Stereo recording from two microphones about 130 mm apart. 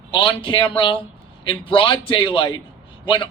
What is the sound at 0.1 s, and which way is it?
A man's voice, 40° left (ahead or behind).